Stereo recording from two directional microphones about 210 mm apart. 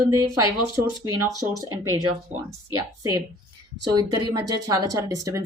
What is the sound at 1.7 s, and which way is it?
Speech, 85° right.